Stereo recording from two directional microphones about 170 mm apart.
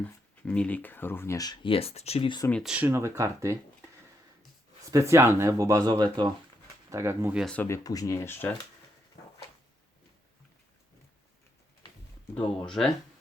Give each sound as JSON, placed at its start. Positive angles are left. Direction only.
{"t": 0.0, "sound": "speech", "side_deg": 5}
{"t": 2.5, "sound": "speech", "side_deg": 5}
{"t": 2.7, "sound": "speech", "side_deg": -15}
{"t": 4.9, "sound": "speech", "side_deg": -15}
{"t": 6.9, "sound": "speech", "side_deg": -15}
{"t": 7.4, "sound": "speech", "side_deg": 10}
{"t": 12.3, "sound": "speech", "side_deg": 5}